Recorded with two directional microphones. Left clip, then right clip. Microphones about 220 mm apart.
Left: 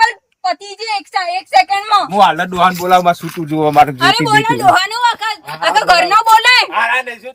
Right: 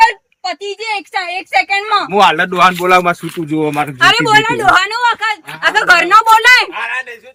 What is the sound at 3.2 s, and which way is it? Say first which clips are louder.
Speech: left 1 dB; 10° left (ahead or behind).